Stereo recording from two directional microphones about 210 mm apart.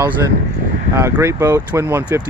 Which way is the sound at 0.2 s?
15° right (ahead or behind).